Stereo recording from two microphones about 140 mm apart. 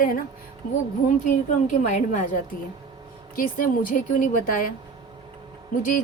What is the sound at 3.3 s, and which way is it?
A woman's voice, 85° left.